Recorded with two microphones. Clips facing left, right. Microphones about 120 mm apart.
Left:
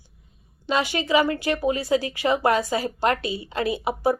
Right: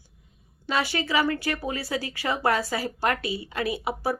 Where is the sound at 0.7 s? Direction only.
20° left (ahead or behind).